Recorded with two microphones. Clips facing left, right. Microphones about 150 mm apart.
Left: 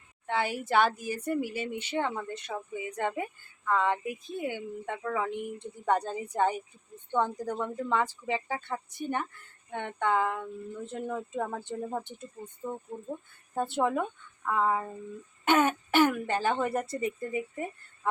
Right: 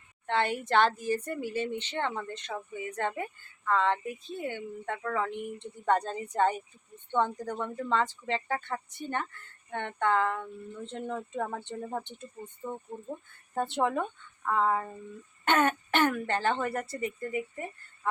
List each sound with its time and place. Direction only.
0.3 s speech: 5° left (ahead or behind)